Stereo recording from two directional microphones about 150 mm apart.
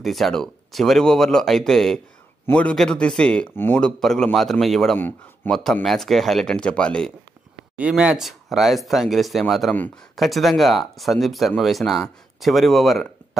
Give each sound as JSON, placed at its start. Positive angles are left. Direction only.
{"t": 0.0, "sound": "speech", "side_deg": 0}
{"t": 4.9, "sound": "speech", "side_deg": 10}
{"t": 5.6, "sound": "speech", "side_deg": 0}
{"t": 7.7, "sound": "speech", "side_deg": -10}